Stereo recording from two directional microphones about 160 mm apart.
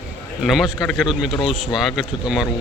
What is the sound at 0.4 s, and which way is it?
Speech, centre (ahead or behind).